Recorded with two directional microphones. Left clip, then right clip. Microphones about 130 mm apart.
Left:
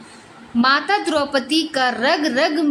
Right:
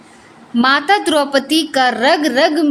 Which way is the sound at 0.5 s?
55° right (ahead or behind).